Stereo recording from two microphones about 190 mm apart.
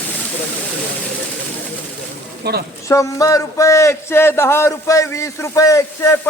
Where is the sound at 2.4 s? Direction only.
60° right (ahead or behind).